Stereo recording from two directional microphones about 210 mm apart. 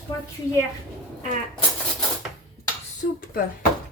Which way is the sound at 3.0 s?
35° left (ahead or behind).